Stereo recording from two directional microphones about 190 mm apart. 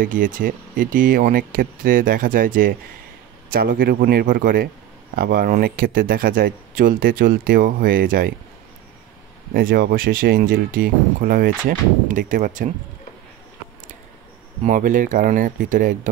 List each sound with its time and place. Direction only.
0.0 s speech: 45° right (ahead or behind)
9.5 s speech: 50° right (ahead or behind)
14.6 s speech: 40° right (ahead or behind)